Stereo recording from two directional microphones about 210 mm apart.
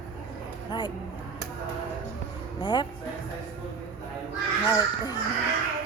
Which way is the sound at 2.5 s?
20° left (ahead or behind).